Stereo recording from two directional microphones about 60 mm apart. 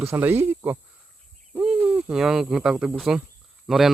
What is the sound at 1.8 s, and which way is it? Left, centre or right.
Hoot, centre.